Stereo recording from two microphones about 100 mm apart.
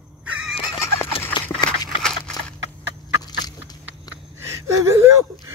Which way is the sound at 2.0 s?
10° left (ahead or behind).